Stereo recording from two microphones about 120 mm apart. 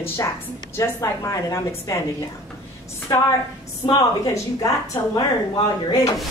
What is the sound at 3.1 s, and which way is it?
A woman's voice, 30° left (ahead or behind).